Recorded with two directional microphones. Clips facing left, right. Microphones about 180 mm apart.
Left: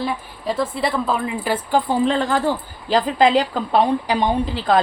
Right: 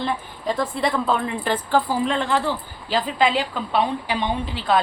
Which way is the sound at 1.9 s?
35° left (ahead or behind).